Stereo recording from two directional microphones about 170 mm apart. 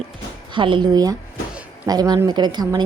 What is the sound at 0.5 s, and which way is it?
A woman's voice, 30° right (ahead or behind).